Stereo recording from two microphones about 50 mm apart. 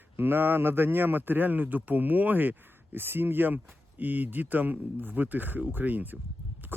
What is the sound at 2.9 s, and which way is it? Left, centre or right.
Speech, right.